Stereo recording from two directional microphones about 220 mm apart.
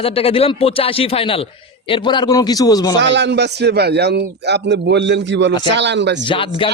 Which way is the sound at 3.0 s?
55° right (ahead or behind).